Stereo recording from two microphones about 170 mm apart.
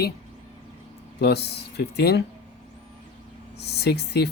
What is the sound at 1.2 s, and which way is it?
Speech, 75° left (ahead or behind).